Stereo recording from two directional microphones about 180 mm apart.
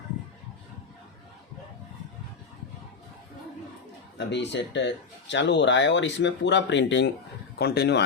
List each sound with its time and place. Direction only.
4.3 s speech: 75° left (ahead or behind)
7.6 s speech: 65° left (ahead or behind)